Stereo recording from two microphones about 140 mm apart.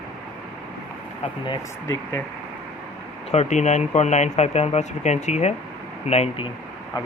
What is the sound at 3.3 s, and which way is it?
Speech, 55° left (ahead or behind).